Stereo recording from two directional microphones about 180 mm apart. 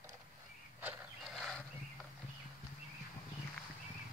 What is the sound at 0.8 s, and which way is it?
Wild animals, centre (ahead or behind).